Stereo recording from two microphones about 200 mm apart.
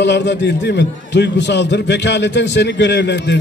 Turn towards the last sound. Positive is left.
turn(degrees=60)  # may be behind; listen again after turning